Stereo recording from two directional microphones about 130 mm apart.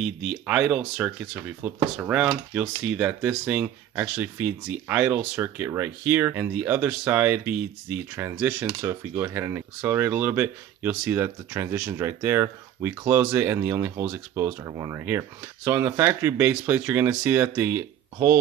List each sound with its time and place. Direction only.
0.0 s speech: 5° right (ahead or behind)